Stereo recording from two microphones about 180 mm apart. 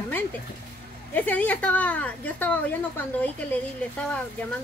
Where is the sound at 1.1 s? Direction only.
10° left (ahead or behind).